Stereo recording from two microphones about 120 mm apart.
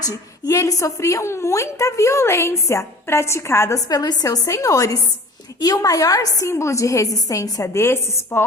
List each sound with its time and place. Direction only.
0.0 s a woman's voice: 30° left (ahead or behind)